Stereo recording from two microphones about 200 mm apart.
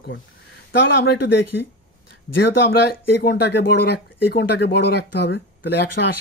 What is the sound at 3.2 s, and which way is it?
Speech, 55° left (ahead or behind).